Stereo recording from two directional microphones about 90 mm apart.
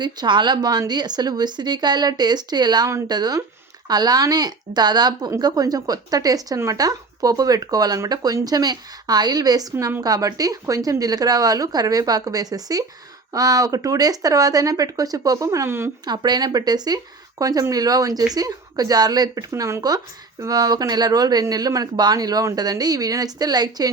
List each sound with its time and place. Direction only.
0.0 s a woman's voice: 55° right (ahead or behind); by 15.9 s 30° right (ahead or behind)
16.0 s a woman's voice: 55° right (ahead or behind); by 19.8 s 35° right (ahead or behind)
20.4 s a woman's voice: 45° right (ahead or behind)